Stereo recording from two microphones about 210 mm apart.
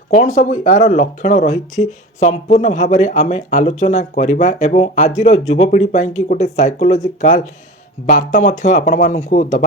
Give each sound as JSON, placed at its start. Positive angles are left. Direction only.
{"t": 0.3, "sound": "speech", "side_deg": 35}